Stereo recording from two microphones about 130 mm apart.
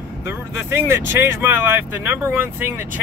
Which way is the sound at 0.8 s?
20° right (ahead or behind).